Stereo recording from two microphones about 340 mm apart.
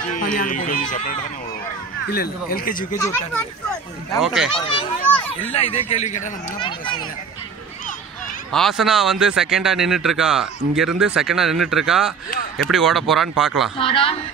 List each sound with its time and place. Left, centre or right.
0.1 s speech: left
4.1 s speech: centre
4.6 s a child's voice: centre
8.5 s speech: centre
13.7 s speech: centre